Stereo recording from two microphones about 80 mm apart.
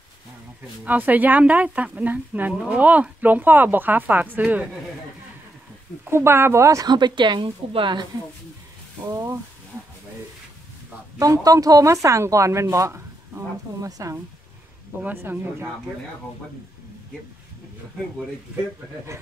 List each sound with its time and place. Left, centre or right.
0.8 s speech: right
6.0 s a woman's voice: right
6.9 s a woman's voice: right
9.0 s speech: right
11.1 s a woman's voice: right
13.7 s speech: right
15.0 s speech: right